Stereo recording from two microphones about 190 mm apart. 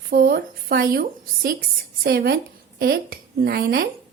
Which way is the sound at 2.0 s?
55° right (ahead or behind).